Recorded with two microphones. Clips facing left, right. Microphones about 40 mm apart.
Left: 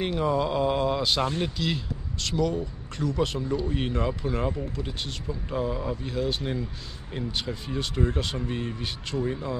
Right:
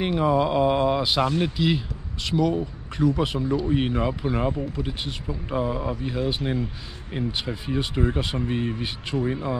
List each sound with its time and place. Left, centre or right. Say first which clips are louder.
0.0 s speech: right 4 dB; centre